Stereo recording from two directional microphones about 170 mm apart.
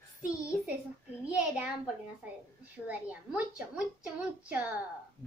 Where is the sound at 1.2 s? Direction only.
5° right (ahead or behind).